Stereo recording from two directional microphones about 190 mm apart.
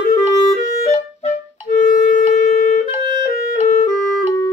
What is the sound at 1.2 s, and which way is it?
Clarinet, 40° left (ahead or behind).